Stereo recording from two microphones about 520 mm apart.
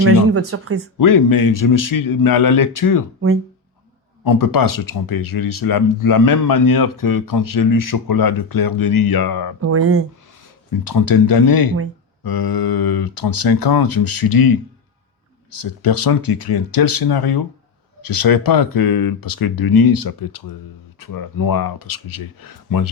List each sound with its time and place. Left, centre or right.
0.3 s speech: right
0.9 s speech: left
4.2 s speech: left
9.6 s speech: right
10.7 s speech: left